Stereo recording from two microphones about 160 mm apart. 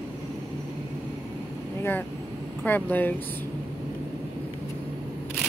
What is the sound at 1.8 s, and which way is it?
A woman's voice, 10° left (ahead or behind).